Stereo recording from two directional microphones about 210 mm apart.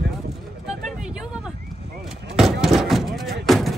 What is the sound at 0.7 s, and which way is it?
Vehicle, 5° right (ahead or behind).